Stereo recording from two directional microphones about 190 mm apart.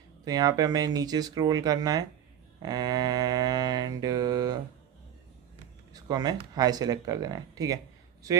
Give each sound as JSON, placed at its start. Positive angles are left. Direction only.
{"t": 0.3, "sound": "mantra", "side_deg": -20}
{"t": 5.9, "sound": "mantra", "side_deg": -20}